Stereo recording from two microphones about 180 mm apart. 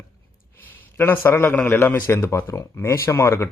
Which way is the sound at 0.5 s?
10° left (ahead or behind).